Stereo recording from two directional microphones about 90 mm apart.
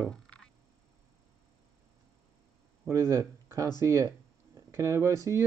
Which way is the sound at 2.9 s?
30° right (ahead or behind).